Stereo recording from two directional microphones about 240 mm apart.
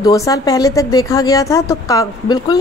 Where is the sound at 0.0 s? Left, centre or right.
Centre.